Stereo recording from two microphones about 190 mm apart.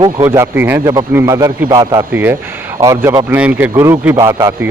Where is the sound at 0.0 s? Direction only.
15° right (ahead or behind).